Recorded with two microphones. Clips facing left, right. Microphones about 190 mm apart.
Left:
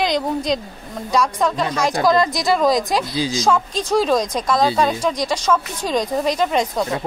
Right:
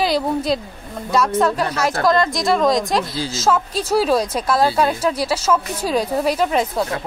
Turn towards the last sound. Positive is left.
turn(degrees=-5)  # may be behind; listen again after turning